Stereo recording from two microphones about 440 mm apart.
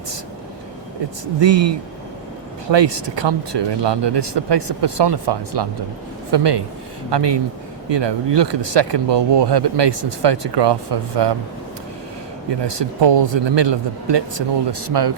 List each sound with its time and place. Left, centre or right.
1.2 s speech: right
12.5 s speech: right